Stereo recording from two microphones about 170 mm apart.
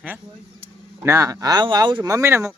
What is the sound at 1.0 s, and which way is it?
Speech, 20° right (ahead or behind).